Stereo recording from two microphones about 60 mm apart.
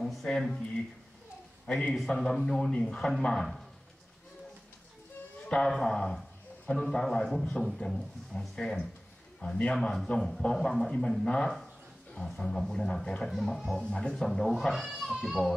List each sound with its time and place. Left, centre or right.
0.0 s speech: centre
1.7 s speech: centre
5.7 s speech: centre
9.4 s speech: left
9.8 s speech: centre
13.3 s speech: centre
13.7 s a child's voice: centre